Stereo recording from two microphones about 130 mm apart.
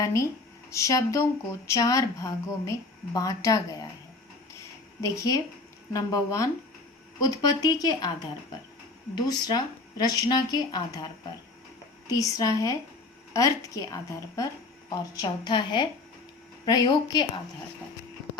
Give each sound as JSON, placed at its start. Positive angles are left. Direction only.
{"t": 0.0, "sound": "speech", "side_deg": 25}
{"t": 5.1, "sound": "a woman's voice", "side_deg": 25}
{"t": 9.2, "sound": "a woman's voice", "side_deg": 30}